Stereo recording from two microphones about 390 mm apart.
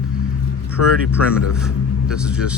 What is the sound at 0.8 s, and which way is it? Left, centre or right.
Speech, left.